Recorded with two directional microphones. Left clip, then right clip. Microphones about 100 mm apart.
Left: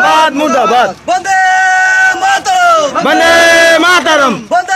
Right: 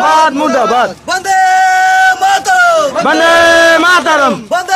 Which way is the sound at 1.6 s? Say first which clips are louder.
Even; 15° right (ahead or behind).